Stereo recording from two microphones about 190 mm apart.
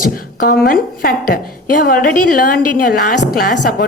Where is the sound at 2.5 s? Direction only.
60° left (ahead or behind).